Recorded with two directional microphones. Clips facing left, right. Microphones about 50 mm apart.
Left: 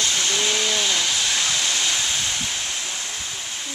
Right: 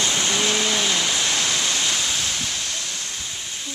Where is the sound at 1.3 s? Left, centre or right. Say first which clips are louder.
Even; centre.